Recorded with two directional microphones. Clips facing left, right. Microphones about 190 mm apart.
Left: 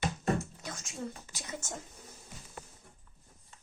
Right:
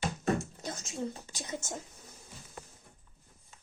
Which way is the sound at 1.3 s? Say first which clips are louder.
Right 3 dB; 20° right (ahead or behind).